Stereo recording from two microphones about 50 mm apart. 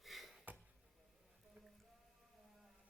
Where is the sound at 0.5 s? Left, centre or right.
Right.